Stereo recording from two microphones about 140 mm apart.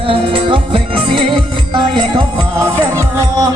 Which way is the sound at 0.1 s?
40° right (ahead or behind).